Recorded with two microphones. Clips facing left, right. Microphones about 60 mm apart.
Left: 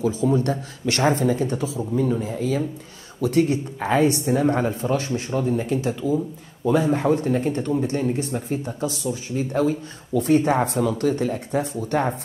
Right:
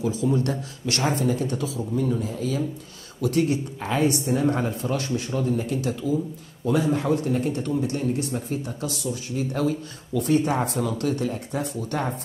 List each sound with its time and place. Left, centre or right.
0.0 s speech: left
2.2 s speech: left